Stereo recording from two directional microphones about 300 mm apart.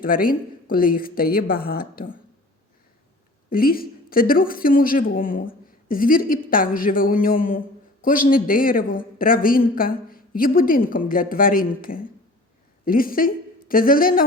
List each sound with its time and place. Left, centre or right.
0.0 s speech: left
3.5 s speech: left